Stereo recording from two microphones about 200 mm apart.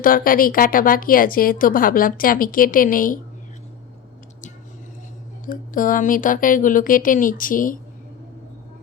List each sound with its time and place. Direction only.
0.0 s a woman's voice: 45° left (ahead or behind)
5.5 s a woman's voice: 45° left (ahead or behind)